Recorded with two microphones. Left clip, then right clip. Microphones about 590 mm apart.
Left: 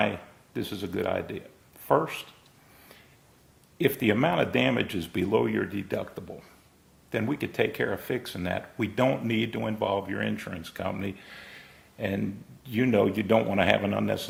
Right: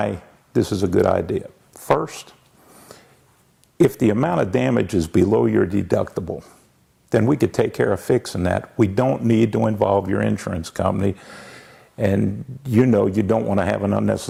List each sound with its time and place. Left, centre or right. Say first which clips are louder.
0.5 s speech: right 14 dB; right
4.0 s speech: right 5 dB; right